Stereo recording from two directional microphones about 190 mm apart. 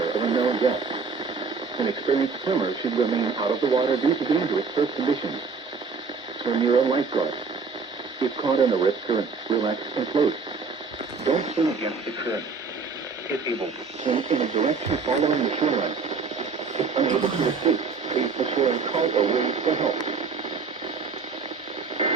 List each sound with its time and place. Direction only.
0.0 s radio: 25° right (ahead or behind)
1.8 s speech: 25° right (ahead or behind)
6.4 s speech: 25° right (ahead or behind)
8.2 s speech: 25° right (ahead or behind)
11.3 s speech: 40° right (ahead or behind)
14.1 s speech: 35° right (ahead or behind)
16.7 s a sound: 35° right (ahead or behind)
17.7 s radio: 35° right (ahead or behind)
18.5 s speech: 35° right (ahead or behind)